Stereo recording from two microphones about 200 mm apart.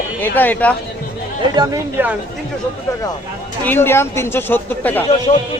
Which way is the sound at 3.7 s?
10° left (ahead or behind).